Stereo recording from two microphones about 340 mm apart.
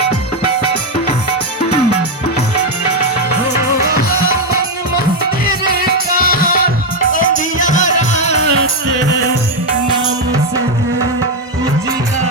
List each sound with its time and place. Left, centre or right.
6.2 s music: left